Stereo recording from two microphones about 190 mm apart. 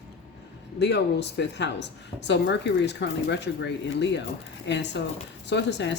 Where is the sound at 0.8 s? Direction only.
65° left (ahead or behind).